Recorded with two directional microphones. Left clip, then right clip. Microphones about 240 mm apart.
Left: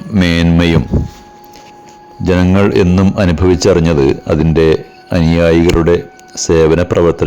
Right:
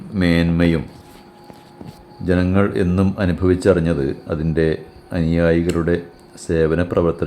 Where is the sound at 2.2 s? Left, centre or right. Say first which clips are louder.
Left 7 dB; left.